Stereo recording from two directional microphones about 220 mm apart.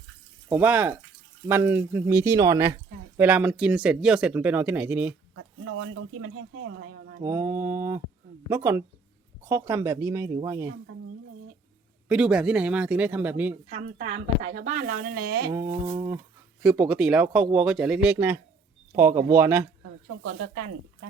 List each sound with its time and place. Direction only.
0.4 s speech: 5° right (ahead or behind)
5.3 s speech: 75° right (ahead or behind)
7.2 s speech: 15° right (ahead or behind)
12.0 s speech: 5° right (ahead or behind)
14.0 s speech: 35° right (ahead or behind)
15.3 s a sound: 45° right (ahead or behind)
15.5 s speech: 20° right (ahead or behind)
16.6 s speech: 5° right (ahead or behind)
20.2 s speech: 65° right (ahead or behind)